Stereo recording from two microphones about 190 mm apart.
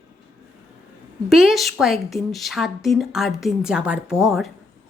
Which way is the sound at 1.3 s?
Centre (ahead or behind).